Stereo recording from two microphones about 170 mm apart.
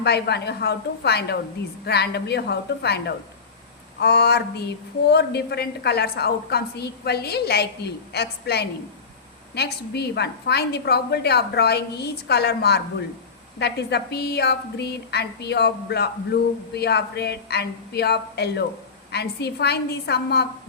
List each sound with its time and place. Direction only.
0.0 s a woman's voice: 75° left (ahead or behind)
4.0 s a woman's voice: 70° left (ahead or behind)